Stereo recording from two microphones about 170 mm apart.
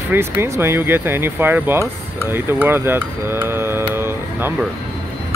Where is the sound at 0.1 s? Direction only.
15° right (ahead or behind).